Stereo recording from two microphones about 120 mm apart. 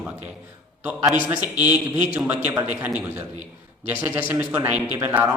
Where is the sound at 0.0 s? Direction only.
10° right (ahead or behind).